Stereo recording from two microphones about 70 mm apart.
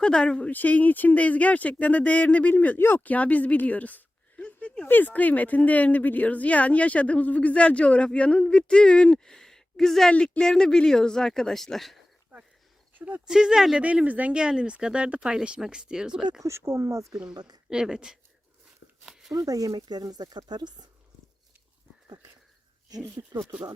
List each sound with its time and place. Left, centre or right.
0.0 s speech: centre
4.9 s speech: left; by 11.9 s centre
13.0 s speech: right
13.2 s speech: centre
13.8 s speech: right
16.4 s speech: right
17.3 s speech: right
17.7 s speech: centre
19.0 s a sound: centre
19.3 s speech: right
23.2 s speech: right